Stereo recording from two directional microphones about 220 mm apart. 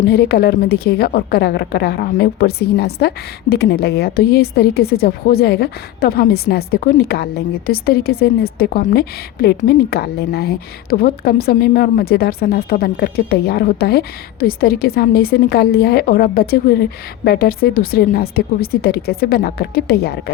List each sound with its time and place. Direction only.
0.0 s a woman's voice: 45° left (ahead or behind)